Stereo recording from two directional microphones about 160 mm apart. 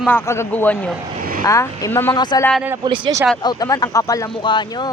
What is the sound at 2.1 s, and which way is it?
Speech, 25° left (ahead or behind).